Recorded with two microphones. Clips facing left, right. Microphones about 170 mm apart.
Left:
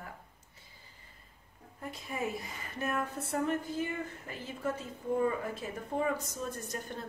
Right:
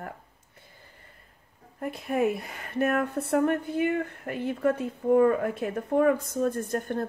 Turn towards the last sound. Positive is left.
turn(degrees=-55)  # may be behind; listen again after turning